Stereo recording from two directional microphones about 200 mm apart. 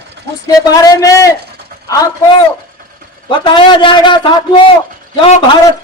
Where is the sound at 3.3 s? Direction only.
25° left (ahead or behind).